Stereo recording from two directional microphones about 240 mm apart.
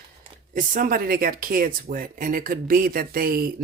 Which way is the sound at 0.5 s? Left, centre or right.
Right.